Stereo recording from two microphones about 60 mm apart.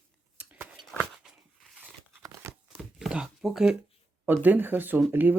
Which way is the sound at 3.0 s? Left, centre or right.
Centre.